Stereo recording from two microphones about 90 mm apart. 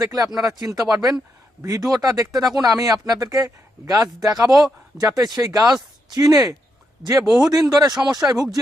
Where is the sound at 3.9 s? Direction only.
45° right (ahead or behind).